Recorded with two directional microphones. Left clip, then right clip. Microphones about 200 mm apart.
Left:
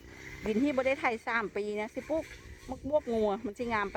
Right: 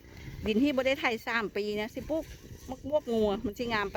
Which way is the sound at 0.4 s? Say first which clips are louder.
Right 2 dB; 15° right (ahead or behind).